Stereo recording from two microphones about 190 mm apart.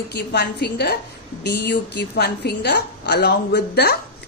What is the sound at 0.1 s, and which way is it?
Speech, 60° left (ahead or behind).